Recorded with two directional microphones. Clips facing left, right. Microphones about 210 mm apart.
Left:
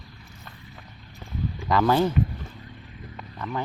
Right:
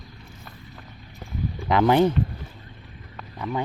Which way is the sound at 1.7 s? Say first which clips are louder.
Right 3 dB; 20° right (ahead or behind).